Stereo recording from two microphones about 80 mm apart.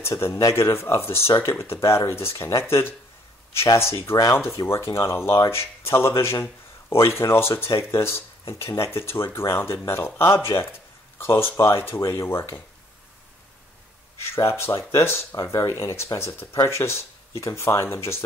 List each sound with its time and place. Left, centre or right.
0.4 s speech: left
14.3 s speech: left